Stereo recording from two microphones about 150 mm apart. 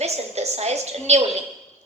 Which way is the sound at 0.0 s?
45° right (ahead or behind).